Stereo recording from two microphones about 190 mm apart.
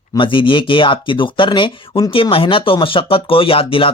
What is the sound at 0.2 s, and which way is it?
Speech, 25° left (ahead or behind).